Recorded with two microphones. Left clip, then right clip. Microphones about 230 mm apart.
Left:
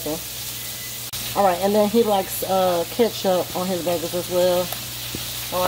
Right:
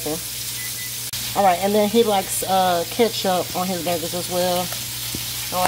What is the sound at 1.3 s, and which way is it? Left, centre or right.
Speech, right.